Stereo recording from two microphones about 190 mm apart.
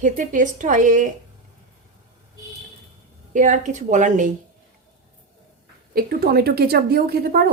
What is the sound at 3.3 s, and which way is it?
A woman's voice, 40° right (ahead or behind).